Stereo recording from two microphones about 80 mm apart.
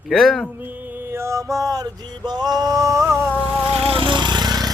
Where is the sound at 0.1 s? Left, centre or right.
Centre.